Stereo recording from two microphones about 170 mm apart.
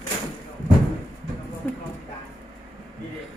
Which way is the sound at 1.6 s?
5° left (ahead or behind).